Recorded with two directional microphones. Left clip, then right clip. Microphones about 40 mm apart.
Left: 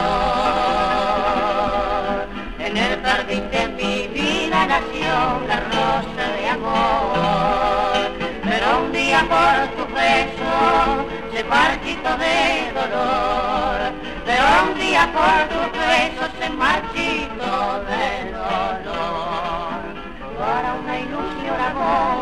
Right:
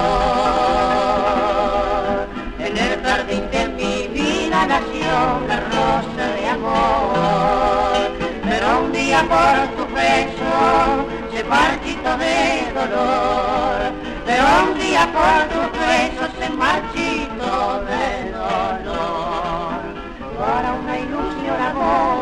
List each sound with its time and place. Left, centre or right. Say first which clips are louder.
0.0 s music: right 2 dB; left
5.0 s music: right 1 dB; left
9.3 s speech: right 1 dB; left
10.1 s music: right 1 dB; left
12.3 s music: even; right
12.8 s music: right 3 dB; left
15.8 s music: even; right
16.2 s music: right 1 dB; left
21.8 s speech: right 2 dB; left